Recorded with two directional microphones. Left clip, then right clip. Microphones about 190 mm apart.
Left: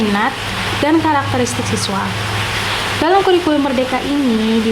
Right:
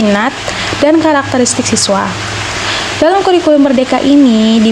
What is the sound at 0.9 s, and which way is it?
Speech, 40° right (ahead or behind).